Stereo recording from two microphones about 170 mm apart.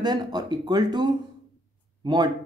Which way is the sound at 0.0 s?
25° right (ahead or behind).